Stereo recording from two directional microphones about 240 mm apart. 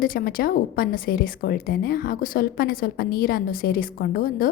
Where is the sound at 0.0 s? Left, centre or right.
Left.